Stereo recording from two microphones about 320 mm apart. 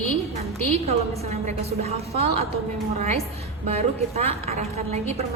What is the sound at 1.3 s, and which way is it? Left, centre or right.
Speech, centre.